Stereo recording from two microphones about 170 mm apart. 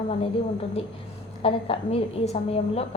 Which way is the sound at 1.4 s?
35° left (ahead or behind).